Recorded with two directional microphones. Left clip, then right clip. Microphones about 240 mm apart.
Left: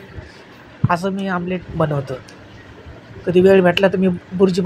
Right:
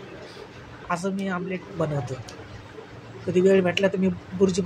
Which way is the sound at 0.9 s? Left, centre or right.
Centre.